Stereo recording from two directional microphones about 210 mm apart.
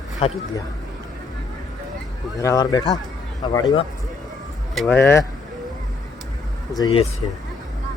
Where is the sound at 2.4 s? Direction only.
15° left (ahead or behind).